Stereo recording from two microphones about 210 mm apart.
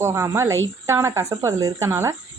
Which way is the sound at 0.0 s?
10° right (ahead or behind).